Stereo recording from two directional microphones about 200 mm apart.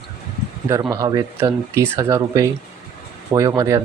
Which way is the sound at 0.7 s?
20° right (ahead or behind).